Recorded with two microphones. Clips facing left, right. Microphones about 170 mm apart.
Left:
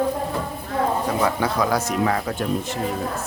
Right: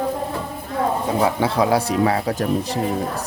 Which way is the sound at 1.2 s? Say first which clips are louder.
Right 4 dB; 30° right (ahead or behind).